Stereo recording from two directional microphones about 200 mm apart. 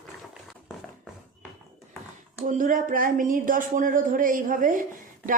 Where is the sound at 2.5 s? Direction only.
40° right (ahead or behind).